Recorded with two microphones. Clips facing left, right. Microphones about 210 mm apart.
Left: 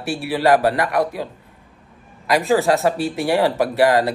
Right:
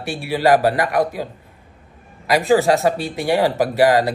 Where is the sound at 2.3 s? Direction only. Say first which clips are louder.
Right 2 dB; centre (ahead or behind).